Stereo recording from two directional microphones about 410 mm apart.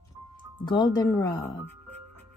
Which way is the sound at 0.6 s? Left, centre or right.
Centre.